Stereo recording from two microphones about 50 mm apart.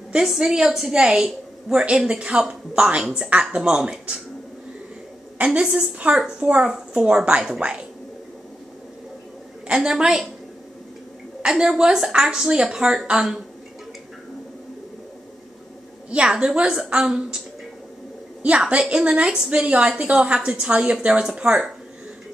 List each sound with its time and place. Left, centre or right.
0.1 s a woman's voice: centre
5.4 s a woman's voice: right
9.7 s a woman's voice: centre
11.4 s a woman's voice: centre
16.1 s a woman's voice: centre
18.4 s a woman's voice: right